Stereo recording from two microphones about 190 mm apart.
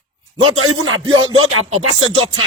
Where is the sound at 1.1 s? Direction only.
90° right.